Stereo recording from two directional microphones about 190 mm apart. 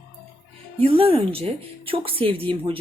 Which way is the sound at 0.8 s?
30° right (ahead or behind).